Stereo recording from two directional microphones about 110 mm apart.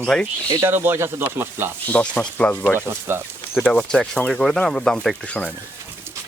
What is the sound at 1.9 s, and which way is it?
Speech, 15° left (ahead or behind).